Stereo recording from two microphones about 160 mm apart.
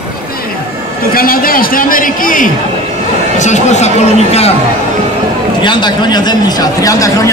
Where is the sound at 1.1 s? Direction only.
65° left (ahead or behind).